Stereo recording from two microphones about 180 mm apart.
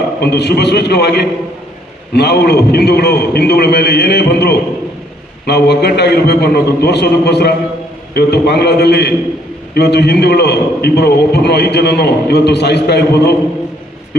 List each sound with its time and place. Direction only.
0.2 s a man's voice: 65° left (ahead or behind)